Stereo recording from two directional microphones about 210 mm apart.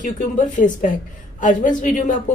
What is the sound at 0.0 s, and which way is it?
A woman's voice, 40° left (ahead or behind).